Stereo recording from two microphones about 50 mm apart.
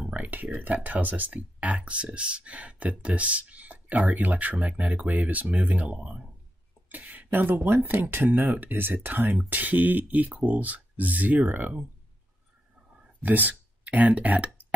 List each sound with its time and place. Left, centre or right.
0.1 s speech: right
6.9 s a sound: right
7.6 s speech: right
13.2 s speech: right